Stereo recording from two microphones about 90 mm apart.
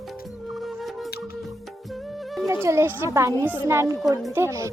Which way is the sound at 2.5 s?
30° right (ahead or behind).